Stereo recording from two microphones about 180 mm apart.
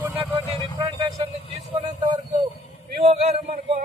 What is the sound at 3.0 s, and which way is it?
Speech, 35° right (ahead or behind).